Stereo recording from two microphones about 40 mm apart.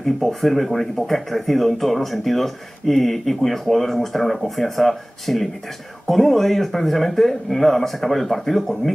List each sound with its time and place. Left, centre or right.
0.0 s speech: centre